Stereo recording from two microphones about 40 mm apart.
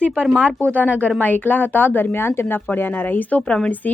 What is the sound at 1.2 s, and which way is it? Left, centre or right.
Speech, left.